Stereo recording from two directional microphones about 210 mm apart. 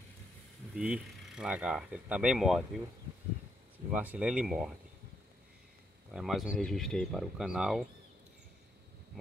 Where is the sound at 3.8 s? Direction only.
5° right (ahead or behind).